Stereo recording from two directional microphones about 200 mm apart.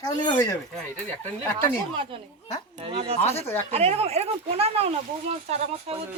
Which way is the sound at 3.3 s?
10° left (ahead or behind).